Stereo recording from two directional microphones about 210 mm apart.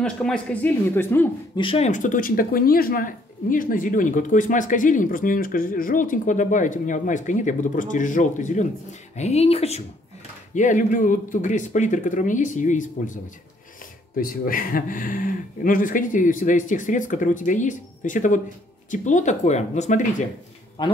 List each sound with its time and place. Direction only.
0.0 s speech: 5° left (ahead or behind)
1.6 s speech: 30° left (ahead or behind)
20.8 s speech: 20° left (ahead or behind)